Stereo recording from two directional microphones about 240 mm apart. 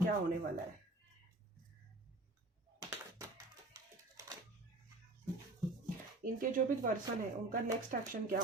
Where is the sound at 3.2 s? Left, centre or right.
Centre.